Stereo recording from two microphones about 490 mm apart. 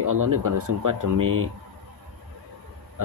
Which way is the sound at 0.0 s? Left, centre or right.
Right.